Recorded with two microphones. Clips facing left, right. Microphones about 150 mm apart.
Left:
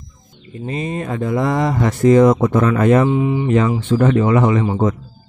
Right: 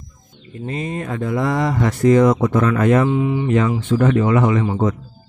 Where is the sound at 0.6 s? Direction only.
20° left (ahead or behind).